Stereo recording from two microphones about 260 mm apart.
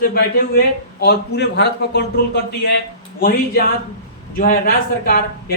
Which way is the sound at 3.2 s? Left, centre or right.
Left.